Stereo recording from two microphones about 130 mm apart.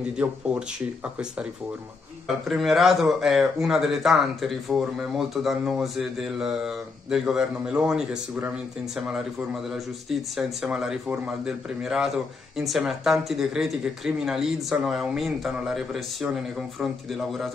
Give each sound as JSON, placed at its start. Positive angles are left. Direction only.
{"t": 0.2, "sound": "speech", "side_deg": -5}
{"t": 2.4, "sound": "speech", "side_deg": 0}